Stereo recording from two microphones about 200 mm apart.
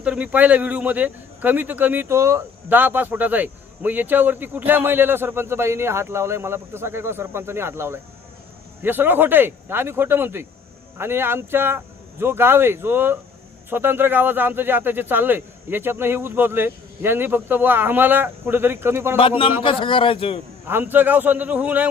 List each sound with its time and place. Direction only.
0.0 s speech: 5° right (ahead or behind)
19.6 s a man's voice: 25° left (ahead or behind)
20.7 s speech: 10° right (ahead or behind)